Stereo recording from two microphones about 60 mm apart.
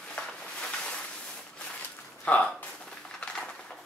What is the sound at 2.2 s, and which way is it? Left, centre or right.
Speech, left.